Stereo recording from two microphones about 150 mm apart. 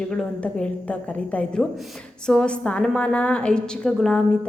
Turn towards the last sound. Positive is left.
turn(degrees=5)  # may be behind; listen again after turning